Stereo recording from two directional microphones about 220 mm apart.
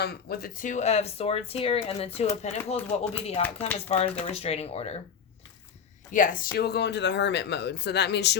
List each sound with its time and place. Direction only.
0.0 s speech: 45° left (ahead or behind); by 4.9 s 25° left (ahead or behind)
6.1 s speech: 35° left (ahead or behind)